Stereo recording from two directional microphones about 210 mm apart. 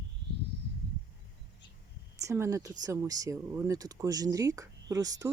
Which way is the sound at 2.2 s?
15° right (ahead or behind).